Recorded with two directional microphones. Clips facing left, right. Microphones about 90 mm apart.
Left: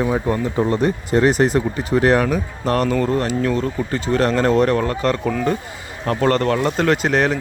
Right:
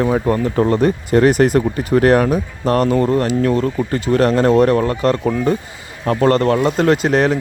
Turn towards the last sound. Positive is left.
turn(degrees=-45)  # may be behind; listen again after turning